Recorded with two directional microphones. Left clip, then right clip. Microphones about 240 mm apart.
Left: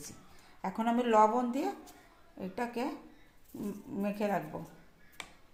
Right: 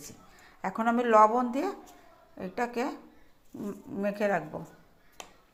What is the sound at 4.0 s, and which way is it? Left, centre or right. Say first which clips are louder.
Speech: right 5 dB; centre.